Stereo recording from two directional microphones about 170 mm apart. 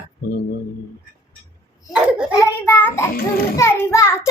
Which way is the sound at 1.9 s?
5° right (ahead or behind).